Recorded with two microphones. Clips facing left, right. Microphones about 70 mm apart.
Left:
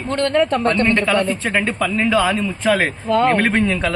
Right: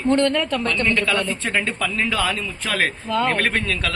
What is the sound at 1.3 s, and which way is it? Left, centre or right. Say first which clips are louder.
Speech: left 4 dB; centre.